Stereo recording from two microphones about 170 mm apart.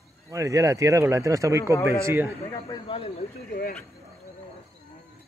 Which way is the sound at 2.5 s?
30° left (ahead or behind).